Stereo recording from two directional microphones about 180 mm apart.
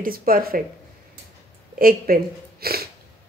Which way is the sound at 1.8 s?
55° right (ahead or behind).